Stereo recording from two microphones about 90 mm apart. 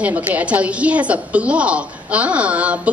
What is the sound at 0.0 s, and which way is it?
A woman's voice, 15° right (ahead or behind).